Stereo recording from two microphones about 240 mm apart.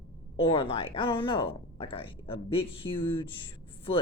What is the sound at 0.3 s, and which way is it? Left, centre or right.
Speech, left.